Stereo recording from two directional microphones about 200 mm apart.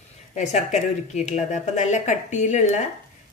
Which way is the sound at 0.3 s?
35° left (ahead or behind).